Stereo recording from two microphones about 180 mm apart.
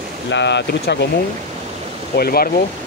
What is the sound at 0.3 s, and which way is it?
Speech, 70° left (ahead or behind).